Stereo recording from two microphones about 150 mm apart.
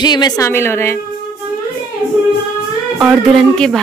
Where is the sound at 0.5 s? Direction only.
15° left (ahead or behind).